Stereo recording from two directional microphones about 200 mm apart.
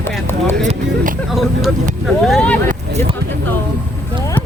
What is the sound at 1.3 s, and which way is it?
Speech, centre (ahead or behind).